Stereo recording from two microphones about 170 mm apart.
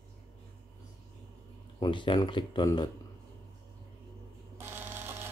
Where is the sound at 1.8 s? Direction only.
30° left (ahead or behind).